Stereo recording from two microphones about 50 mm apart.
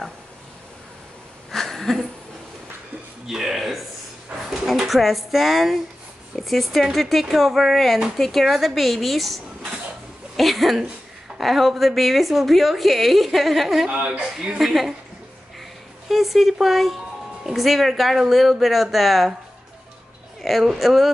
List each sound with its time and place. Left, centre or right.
1.5 s a sound: centre
3.3 s a sound: centre
4.6 s speech: centre
13.8 s speech: right
14.6 s speech: centre
16.1 s speech: centre
20.4 s speech: centre